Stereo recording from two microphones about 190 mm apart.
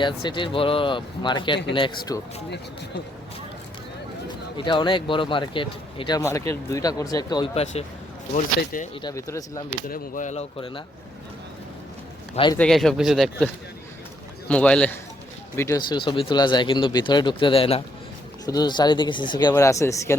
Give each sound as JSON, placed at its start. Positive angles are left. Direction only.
{"t": 0.0, "sound": "speech", "side_deg": 25}
{"t": 4.5, "sound": "speech", "side_deg": 25}
{"t": 9.0, "sound": "speech", "side_deg": 20}
{"t": 9.9, "sound": "speech", "side_deg": 40}
{"t": 12.5, "sound": "speech", "side_deg": 5}